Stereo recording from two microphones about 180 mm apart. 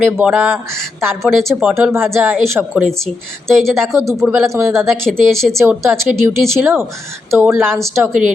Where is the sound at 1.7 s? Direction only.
15° right (ahead or behind).